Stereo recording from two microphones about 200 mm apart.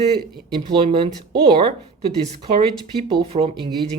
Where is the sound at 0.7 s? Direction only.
25° right (ahead or behind).